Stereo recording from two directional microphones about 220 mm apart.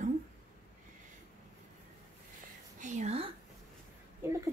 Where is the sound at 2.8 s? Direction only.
30° right (ahead or behind).